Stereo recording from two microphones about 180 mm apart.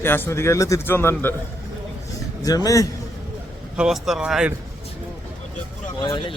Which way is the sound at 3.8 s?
Centre (ahead or behind).